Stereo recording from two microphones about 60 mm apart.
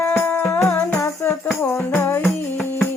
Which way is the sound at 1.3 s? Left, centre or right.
Left.